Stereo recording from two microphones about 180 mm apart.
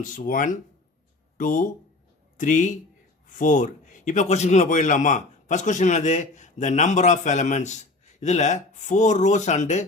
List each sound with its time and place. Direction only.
0.0 s a man's voice: 45° left (ahead or behind)